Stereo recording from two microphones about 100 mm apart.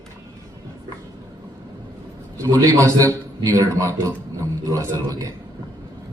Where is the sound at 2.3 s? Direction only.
30° right (ahead or behind).